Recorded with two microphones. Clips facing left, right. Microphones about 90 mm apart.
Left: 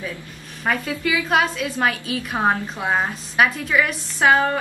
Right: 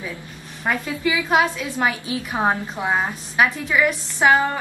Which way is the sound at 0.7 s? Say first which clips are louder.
Even; 10° right (ahead or behind).